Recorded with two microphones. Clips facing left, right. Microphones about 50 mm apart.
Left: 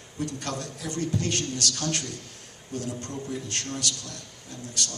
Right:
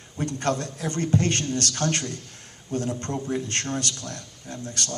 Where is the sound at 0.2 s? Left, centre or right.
Right.